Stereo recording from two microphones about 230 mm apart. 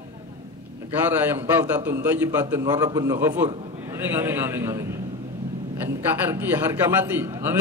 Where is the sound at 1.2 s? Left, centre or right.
Centre.